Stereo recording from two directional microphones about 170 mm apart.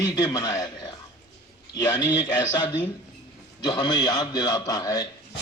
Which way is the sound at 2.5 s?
25° left (ahead or behind).